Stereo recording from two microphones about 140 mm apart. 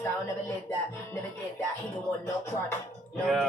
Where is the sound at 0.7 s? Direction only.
15° left (ahead or behind).